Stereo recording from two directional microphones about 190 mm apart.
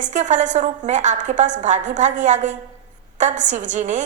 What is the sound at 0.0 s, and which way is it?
A woman's voice, 40° right (ahead or behind).